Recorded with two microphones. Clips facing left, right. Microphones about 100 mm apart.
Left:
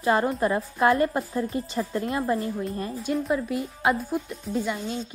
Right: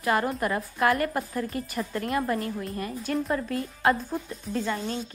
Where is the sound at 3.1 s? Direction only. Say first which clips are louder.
Left 2 dB; 15° left (ahead or behind).